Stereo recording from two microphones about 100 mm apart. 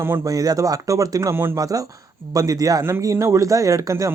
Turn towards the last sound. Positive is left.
turn(degrees=-35)  # may be behind; listen again after turning